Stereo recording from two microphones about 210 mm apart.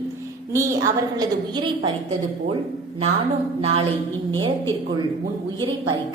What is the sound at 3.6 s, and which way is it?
Speech, 30° right (ahead or behind).